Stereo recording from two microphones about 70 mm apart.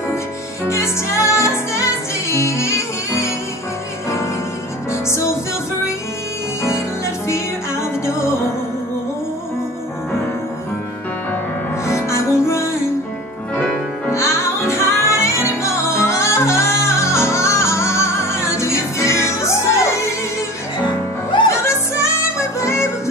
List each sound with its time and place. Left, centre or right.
0.7 s music: left
5.0 s music: left
7.2 s music: left
11.8 s music: left
13.6 s music: centre
14.1 s music: left
21.6 s music: left